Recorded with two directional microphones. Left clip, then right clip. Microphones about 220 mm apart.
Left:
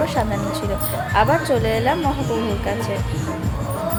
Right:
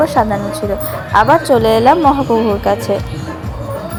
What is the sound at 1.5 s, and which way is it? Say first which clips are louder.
Speech: right 10 dB; 30° right (ahead or behind).